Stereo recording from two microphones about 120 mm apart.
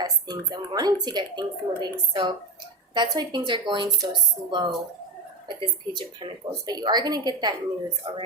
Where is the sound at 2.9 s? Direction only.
35° right (ahead or behind).